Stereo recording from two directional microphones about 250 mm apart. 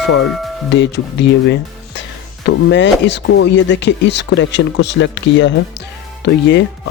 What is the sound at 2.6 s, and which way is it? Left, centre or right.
Speech, left.